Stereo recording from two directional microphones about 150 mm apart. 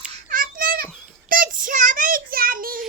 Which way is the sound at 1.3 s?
65° right (ahead or behind).